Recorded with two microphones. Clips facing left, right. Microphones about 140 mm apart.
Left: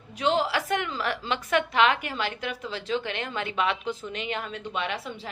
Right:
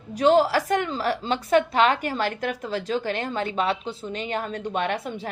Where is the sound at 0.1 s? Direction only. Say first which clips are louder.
Right 7 dB; 40° right (ahead or behind).